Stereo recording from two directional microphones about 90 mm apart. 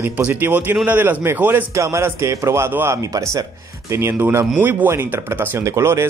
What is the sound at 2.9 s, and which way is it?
A man's voice, 40° right (ahead or behind).